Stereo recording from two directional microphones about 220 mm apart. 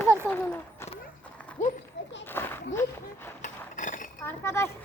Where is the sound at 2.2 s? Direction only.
10° left (ahead or behind).